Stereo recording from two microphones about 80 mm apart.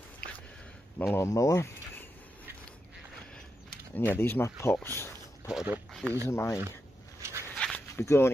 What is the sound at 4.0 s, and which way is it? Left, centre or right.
Speech, left.